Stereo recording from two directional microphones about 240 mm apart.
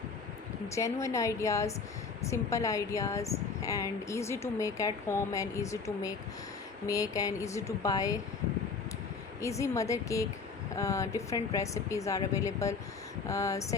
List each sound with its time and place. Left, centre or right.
0.8 s a woman's voice: centre
9.4 s a woman's voice: centre